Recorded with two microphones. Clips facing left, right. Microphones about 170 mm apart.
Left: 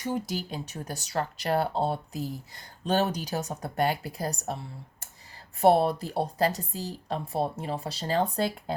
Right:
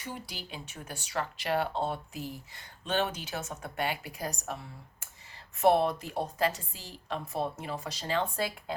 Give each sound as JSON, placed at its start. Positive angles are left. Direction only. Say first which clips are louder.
{"t": 0.0, "sound": "speech", "louder": "left 11 dB", "side_deg": 40}